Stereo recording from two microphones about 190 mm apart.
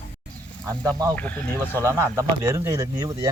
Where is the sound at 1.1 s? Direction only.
10° left (ahead or behind).